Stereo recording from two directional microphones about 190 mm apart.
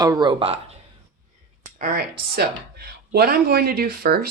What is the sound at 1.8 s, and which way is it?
Speech, 50° right (ahead or behind).